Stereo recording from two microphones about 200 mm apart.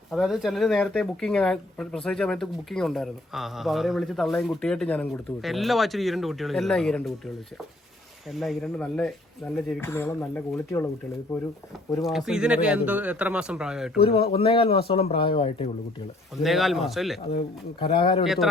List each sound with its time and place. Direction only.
0.1 s speech: centre (ahead or behind)
8.3 s speech: centre (ahead or behind)
12.0 s speech: centre (ahead or behind)
14.0 s speech: 30° left (ahead or behind)
16.4 s speech: centre (ahead or behind)
17.7 s speech: 25° left (ahead or behind)